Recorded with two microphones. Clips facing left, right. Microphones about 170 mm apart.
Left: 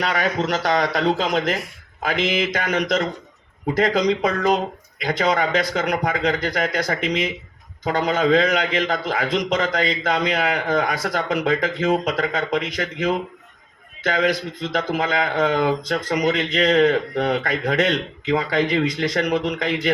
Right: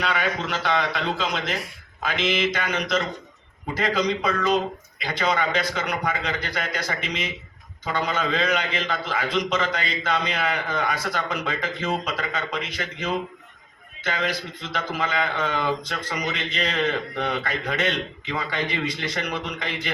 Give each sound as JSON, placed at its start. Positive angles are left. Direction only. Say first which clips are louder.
{"t": 0.0, "sound": "a man's voice", "louder": "left 4 dB", "side_deg": 40}